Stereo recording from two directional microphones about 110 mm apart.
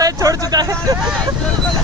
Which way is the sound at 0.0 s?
30° right (ahead or behind).